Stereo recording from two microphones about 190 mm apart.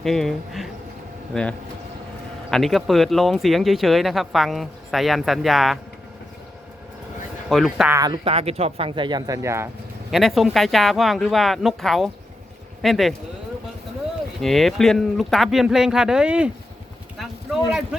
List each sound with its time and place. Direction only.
0.0 s speech: centre (ahead or behind)
7.5 s speech: centre (ahead or behind)
7.9 s speech: 20° right (ahead or behind)
10.1 s speech: centre (ahead or behind)
14.4 s speech: centre (ahead or behind)